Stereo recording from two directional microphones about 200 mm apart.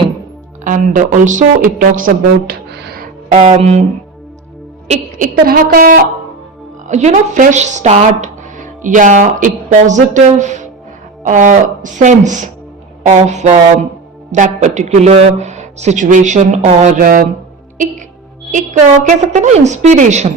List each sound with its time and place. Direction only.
0.6 s speech: 40° right (ahead or behind)
3.3 s speech: 35° right (ahead or behind)
4.9 s a woman's voice: 45° right (ahead or behind)
11.2 s speech: 40° right (ahead or behind)
18.5 s speech: 40° right (ahead or behind)